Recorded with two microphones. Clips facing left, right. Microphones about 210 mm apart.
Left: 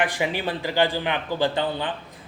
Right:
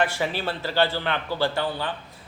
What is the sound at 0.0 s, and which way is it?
Speech, 15° left (ahead or behind).